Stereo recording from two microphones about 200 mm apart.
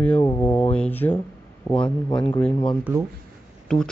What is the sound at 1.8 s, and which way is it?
Speech, 25° left (ahead or behind).